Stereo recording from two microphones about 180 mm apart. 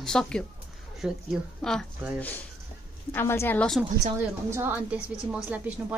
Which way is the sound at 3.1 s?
15° left (ahead or behind).